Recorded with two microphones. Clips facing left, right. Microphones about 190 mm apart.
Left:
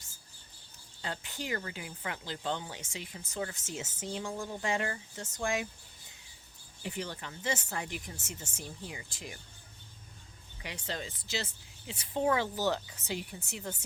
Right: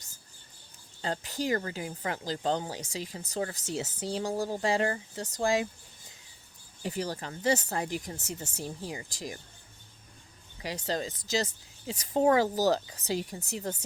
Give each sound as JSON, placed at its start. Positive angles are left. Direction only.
{"t": 1.0, "sound": "speech", "side_deg": -40}
{"t": 6.8, "sound": "speech", "side_deg": -40}
{"t": 10.6, "sound": "speech", "side_deg": -40}